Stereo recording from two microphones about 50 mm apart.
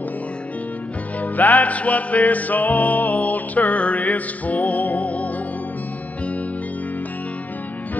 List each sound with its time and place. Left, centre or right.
1.2 s music: left